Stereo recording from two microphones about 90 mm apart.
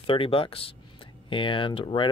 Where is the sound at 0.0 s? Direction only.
85° left.